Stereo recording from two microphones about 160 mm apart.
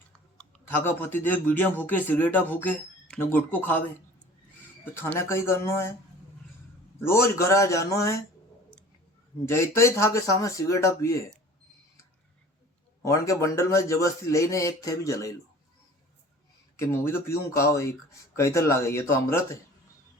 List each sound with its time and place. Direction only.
0.3 s speech: 10° left (ahead or behind)
4.9 s speech: 15° left (ahead or behind)
7.0 s speech: 15° left (ahead or behind)
9.5 s speech: 15° left (ahead or behind)
13.1 s speech: 20° left (ahead or behind)
16.7 s speech: 15° left (ahead or behind)